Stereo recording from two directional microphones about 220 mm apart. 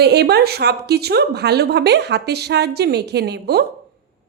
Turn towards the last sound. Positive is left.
turn(degrees=-50)  # may be behind; listen again after turning